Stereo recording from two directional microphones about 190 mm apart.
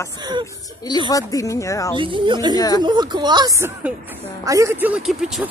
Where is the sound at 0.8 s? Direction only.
20° left (ahead or behind).